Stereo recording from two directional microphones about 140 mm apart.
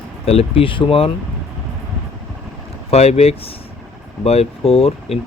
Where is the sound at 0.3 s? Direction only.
45° left (ahead or behind).